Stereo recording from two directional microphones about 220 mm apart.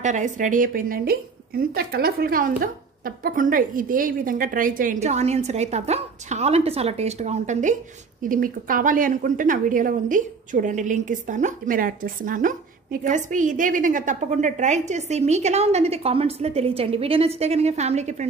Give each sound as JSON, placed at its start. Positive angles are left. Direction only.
{"t": 0.0, "sound": "a woman's voice", "side_deg": -35}